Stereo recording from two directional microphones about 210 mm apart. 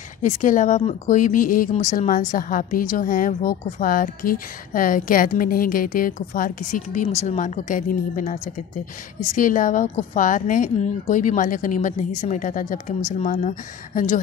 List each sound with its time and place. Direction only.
0.2 s a woman's voice: 35° left (ahead or behind)